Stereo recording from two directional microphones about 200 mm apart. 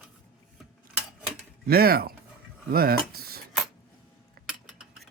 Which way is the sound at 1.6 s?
50° right (ahead or behind).